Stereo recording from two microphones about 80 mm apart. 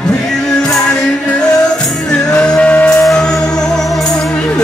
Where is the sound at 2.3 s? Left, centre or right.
Centre.